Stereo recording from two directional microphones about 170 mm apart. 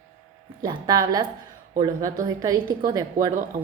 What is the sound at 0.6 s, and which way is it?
A woman's voice, 25° right (ahead or behind).